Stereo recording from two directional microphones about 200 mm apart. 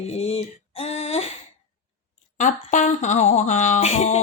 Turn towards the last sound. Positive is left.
turn(degrees=35)  # may be behind; listen again after turning